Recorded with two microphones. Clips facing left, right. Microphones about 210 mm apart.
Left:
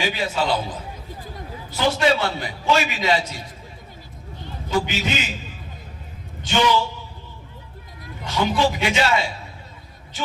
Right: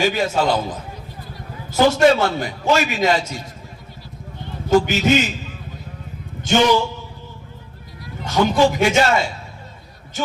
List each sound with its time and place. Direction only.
0.0 s a man's voice: 45° right (ahead or behind)
1.7 s a man's voice: 45° right (ahead or behind)
4.7 s a man's voice: 45° right (ahead or behind)
8.2 s a man's voice: 45° right (ahead or behind)